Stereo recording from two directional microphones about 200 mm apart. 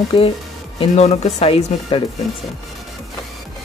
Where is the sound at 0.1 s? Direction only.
25° left (ahead or behind).